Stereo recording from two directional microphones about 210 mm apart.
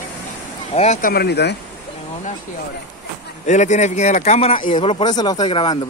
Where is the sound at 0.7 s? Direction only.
35° left (ahead or behind).